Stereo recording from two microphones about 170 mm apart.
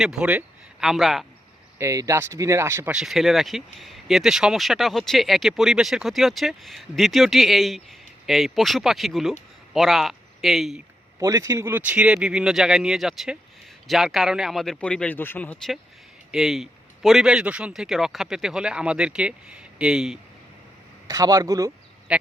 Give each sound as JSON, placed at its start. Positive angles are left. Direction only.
{"t": 0.0, "sound": "speech", "side_deg": -5}
{"t": 1.8, "sound": "speech", "side_deg": -15}
{"t": 11.2, "sound": "speech", "side_deg": -20}
{"t": 21.1, "sound": "speech", "side_deg": -20}
{"t": 22.1, "sound": "speech", "side_deg": -5}